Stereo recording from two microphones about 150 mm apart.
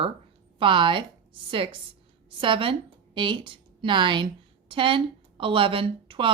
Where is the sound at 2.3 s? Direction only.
35° right (ahead or behind).